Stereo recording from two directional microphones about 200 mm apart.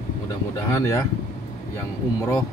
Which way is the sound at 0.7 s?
15° left (ahead or behind).